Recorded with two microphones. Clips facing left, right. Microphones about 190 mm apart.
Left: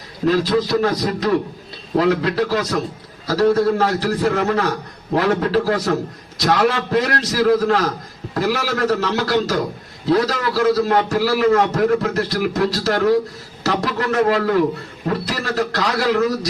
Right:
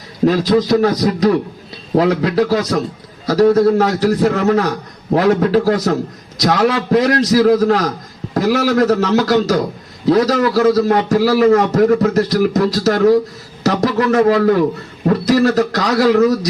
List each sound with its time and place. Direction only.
0.3 s a man's voice: 40° right (ahead or behind)